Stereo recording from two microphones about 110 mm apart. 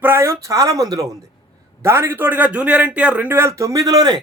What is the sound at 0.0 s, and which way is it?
A man's voice, 25° right (ahead or behind).